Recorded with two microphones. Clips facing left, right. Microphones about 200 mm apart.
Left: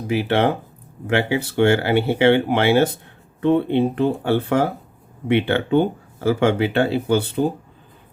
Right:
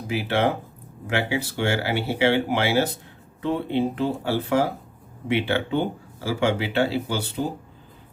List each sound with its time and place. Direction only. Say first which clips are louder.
0.1 s speech: left 4 dB; 55° left (ahead or behind)